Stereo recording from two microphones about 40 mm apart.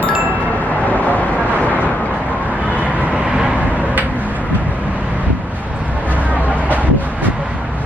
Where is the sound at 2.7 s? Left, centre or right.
Right.